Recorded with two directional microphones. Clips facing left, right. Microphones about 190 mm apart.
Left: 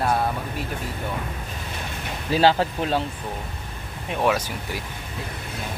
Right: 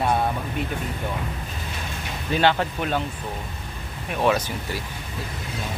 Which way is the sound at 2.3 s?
35° left (ahead or behind).